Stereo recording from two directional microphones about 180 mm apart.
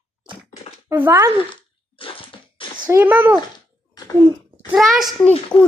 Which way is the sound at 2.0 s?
30° left (ahead or behind).